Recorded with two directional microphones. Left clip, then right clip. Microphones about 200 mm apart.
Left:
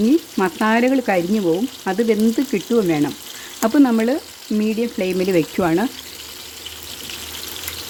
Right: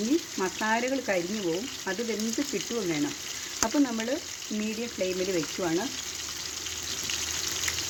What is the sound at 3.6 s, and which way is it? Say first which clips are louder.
Speech: left 12 dB; 45° left (ahead or behind).